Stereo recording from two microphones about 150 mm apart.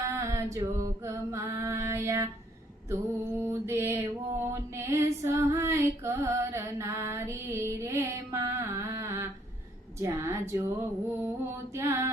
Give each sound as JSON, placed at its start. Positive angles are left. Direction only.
{"t": 0.1, "sound": "a sound", "side_deg": -20}
{"t": 1.0, "sound": "female singing", "side_deg": -20}
{"t": 3.4, "sound": "music", "side_deg": -15}